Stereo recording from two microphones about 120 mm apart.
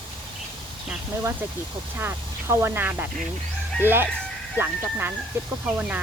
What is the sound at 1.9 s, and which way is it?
Speech, 20° right (ahead or behind).